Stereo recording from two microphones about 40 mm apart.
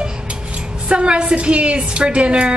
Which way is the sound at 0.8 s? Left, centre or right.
Right.